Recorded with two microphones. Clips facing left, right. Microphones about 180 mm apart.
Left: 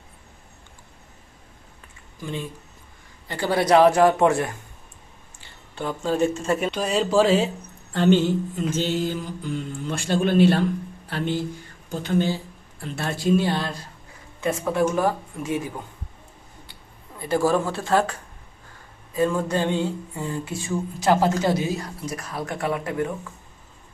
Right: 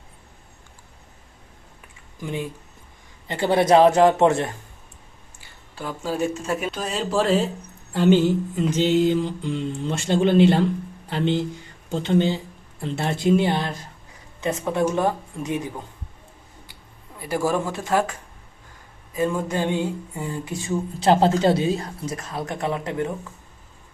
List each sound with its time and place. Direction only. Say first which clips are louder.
2.2 s a sound: right 2 dB; 15° right (ahead or behind)
3.2 s mantra: right 3 dB; 20° right (ahead or behind)
5.4 s speech: left 3 dB; 5° right (ahead or behind)
7.9 s mantra: right 1 dB; 10° right (ahead or behind)
17.2 s a sound: left 2 dB; 10° right (ahead or behind)
21.0 s mantra: right 3 dB; 30° right (ahead or behind)